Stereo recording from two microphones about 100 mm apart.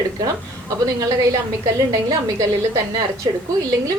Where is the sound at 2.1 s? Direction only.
30° right (ahead or behind).